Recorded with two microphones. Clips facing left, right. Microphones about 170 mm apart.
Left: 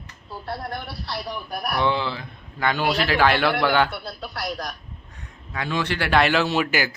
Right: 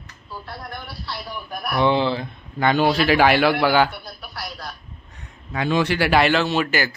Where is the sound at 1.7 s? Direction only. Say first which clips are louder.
Right 5 dB; 20° right (ahead or behind).